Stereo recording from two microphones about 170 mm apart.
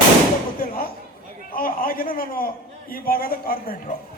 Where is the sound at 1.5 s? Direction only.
55° left (ahead or behind).